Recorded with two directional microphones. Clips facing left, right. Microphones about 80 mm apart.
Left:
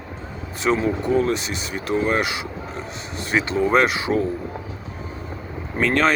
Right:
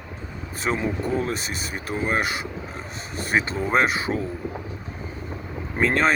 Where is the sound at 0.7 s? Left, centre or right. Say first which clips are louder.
Left 5 dB; centre.